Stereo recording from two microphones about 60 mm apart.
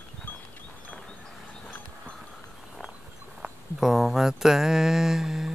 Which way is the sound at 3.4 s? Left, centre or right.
Centre.